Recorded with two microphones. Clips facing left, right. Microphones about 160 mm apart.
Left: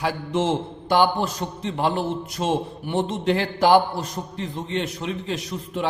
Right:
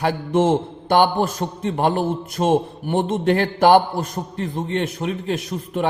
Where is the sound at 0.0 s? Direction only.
55° right (ahead or behind).